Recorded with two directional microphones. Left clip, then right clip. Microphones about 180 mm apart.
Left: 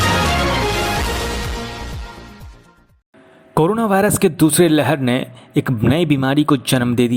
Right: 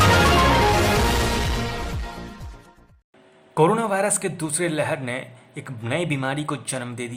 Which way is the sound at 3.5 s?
40° left (ahead or behind).